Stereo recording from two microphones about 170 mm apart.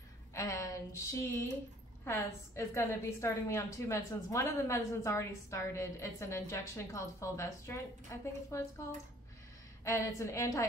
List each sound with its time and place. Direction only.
0.3 s a sound: 20° left (ahead or behind)
2.0 s a woman's voice: 15° left (ahead or behind)
9.8 s a woman's voice: 15° left (ahead or behind)